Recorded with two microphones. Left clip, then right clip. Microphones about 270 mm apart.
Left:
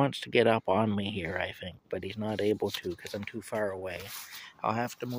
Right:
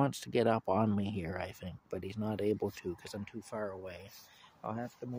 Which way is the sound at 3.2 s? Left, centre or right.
Centre.